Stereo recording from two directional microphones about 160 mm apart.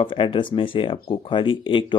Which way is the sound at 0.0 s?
30° left (ahead or behind).